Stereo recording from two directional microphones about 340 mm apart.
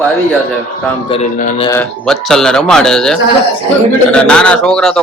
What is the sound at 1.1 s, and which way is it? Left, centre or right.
Speech, left.